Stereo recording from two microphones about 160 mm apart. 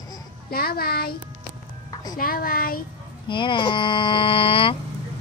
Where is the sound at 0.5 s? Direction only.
70° left (ahead or behind).